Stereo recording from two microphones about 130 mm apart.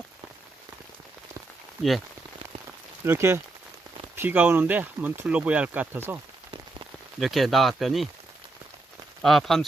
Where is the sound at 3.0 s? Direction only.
20° right (ahead or behind).